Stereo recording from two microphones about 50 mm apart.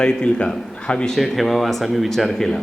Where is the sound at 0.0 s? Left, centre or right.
Centre.